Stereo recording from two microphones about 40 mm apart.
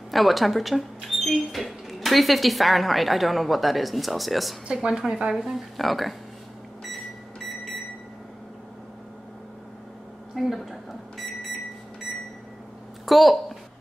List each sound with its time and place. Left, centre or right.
0.1 s speech: centre
4.7 s a woman's voice: centre
10.3 s microwave oven: centre
13.0 s a woman's voice: centre